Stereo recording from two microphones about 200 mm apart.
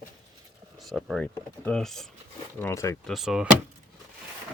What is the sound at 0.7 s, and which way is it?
Speech, centre (ahead or behind).